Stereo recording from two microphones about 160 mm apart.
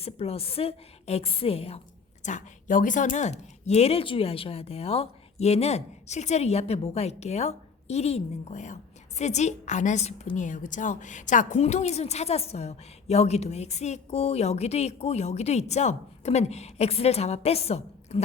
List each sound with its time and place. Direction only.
0.0 s a woman's voice: 40° left (ahead or behind)
2.2 s speech: 55° left (ahead or behind)